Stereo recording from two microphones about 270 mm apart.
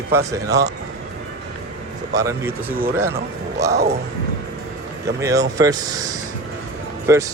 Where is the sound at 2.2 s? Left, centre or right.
Centre.